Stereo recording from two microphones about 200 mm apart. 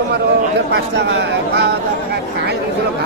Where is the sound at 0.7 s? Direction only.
60° right (ahead or behind).